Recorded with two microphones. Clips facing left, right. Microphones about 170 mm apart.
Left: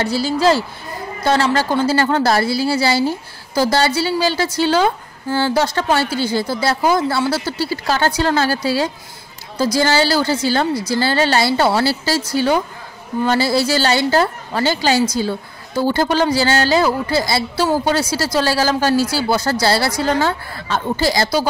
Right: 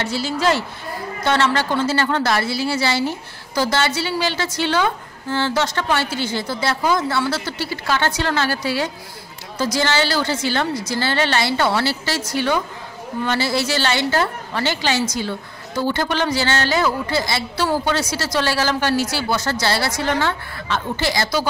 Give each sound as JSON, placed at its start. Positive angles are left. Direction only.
{"t": 0.0, "sound": "a woman's voice", "side_deg": 35}